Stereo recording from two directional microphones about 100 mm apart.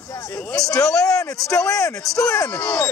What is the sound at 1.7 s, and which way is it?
Speech, 30° left (ahead or behind).